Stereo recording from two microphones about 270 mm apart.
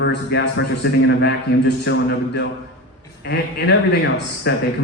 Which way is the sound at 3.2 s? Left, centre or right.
Left.